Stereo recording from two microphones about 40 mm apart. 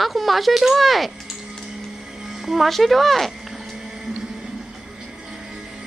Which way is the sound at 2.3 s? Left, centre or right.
Centre.